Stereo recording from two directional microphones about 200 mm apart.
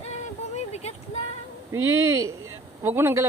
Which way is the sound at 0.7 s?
35° left (ahead or behind).